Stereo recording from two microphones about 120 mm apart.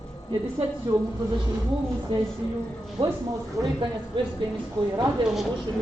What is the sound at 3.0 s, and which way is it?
Speech, 45° right (ahead or behind).